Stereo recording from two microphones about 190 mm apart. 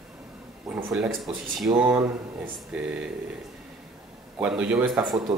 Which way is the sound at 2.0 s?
15° right (ahead or behind).